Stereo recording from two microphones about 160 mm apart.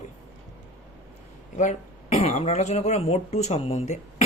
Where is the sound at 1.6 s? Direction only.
45° left (ahead or behind).